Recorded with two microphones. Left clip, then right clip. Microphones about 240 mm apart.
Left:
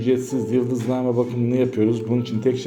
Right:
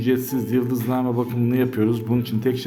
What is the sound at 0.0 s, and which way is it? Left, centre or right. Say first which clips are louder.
Speech: left 1 dB; centre.